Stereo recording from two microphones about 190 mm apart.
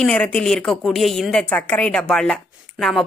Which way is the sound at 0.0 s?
5° left (ahead or behind).